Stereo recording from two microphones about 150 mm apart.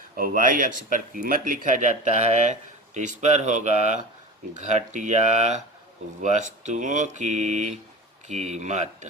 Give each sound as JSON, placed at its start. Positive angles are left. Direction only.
{"t": 0.2, "sound": "speech", "side_deg": -65}